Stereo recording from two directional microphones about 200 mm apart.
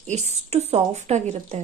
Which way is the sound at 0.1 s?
35° right (ahead or behind).